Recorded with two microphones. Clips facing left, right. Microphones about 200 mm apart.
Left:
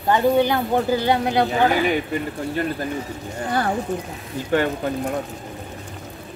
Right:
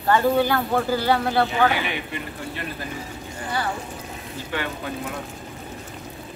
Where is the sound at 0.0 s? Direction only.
20° left (ahead or behind).